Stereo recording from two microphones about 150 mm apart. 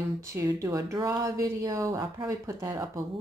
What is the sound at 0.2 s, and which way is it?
Speech, 20° right (ahead or behind).